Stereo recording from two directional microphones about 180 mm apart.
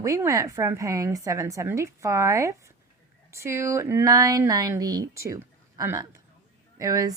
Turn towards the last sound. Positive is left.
turn(degrees=-20)  # may be behind; listen again after turning